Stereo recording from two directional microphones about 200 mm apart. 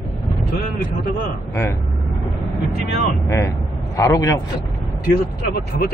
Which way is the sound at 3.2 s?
15° left (ahead or behind).